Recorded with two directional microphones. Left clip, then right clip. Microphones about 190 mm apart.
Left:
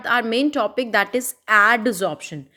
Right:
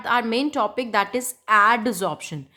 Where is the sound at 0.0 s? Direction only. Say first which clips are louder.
Left 2 dB; 15° left (ahead or behind).